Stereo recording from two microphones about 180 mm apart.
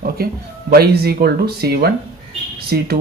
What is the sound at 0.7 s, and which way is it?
Speech, 60° right (ahead or behind).